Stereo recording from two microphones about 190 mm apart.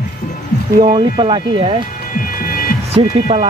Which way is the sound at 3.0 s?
30° right (ahead or behind).